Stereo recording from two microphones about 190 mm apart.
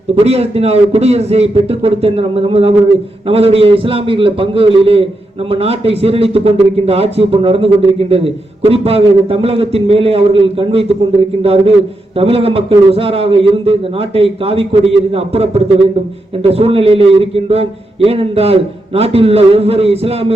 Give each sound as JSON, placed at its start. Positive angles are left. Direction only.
{"t": 0.2, "sound": "a man's voice", "side_deg": -30}